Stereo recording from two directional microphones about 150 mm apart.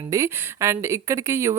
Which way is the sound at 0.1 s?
20° right (ahead or behind).